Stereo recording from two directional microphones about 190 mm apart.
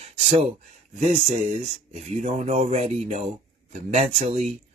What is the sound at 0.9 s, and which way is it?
Speech, 35° right (ahead or behind).